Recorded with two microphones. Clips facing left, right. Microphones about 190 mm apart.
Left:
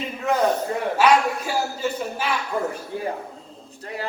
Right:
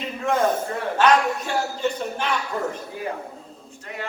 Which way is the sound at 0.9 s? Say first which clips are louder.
Even; 5° left (ahead or behind).